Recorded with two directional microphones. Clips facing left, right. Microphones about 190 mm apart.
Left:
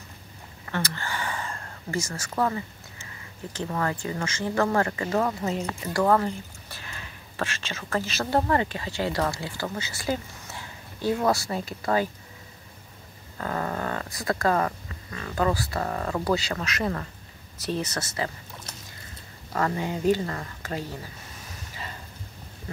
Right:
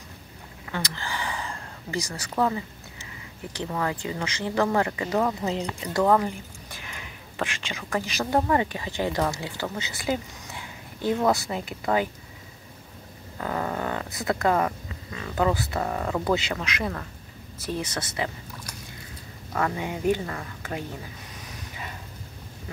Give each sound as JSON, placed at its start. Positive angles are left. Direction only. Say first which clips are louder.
{"t": 0.7, "sound": "a sound", "louder": "left 1 dB", "side_deg": -15}
{"t": 3.5, "sound": "speech", "louder": "even", "side_deg": -15}
{"t": 13.4, "sound": "speech", "louder": "right 1 dB", "side_deg": -10}
{"t": 15.8, "sound": "speech", "louder": "right 1 dB", "side_deg": -5}
{"t": 19.5, "sound": "speech", "louder": "left 1 dB", "side_deg": -5}